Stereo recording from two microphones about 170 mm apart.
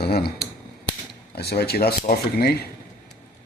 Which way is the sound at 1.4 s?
70° left (ahead or behind).